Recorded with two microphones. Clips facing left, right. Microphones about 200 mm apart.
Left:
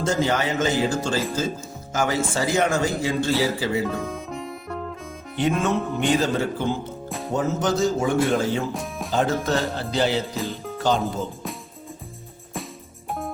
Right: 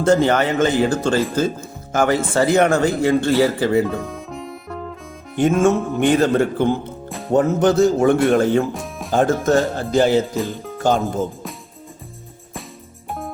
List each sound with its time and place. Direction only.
0.0 s a man's voice: 60° right (ahead or behind)
3.8 s music: centre (ahead or behind)
5.4 s a man's voice: 45° right (ahead or behind)
8.7 s music: centre (ahead or behind)
9.1 s speech: 50° right (ahead or behind)
13.1 s music: centre (ahead or behind)